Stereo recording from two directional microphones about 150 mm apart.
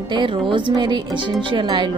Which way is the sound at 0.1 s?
35° right (ahead or behind).